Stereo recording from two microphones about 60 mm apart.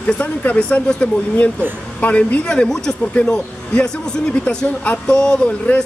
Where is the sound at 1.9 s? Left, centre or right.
Left.